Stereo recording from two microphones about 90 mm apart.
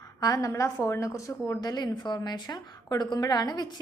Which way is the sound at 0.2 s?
45° left (ahead or behind).